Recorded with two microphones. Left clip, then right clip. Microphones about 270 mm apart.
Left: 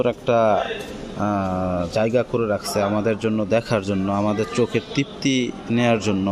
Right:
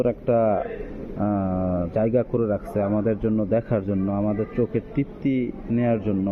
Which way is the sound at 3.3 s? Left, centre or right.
Left.